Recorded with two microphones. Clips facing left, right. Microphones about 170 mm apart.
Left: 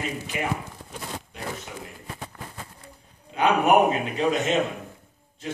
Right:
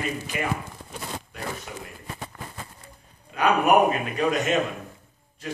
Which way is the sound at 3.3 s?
25° left (ahead or behind).